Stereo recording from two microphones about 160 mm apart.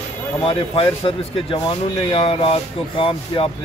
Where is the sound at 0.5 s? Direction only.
35° left (ahead or behind).